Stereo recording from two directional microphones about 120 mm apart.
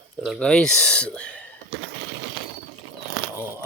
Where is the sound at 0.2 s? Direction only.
5° left (ahead or behind).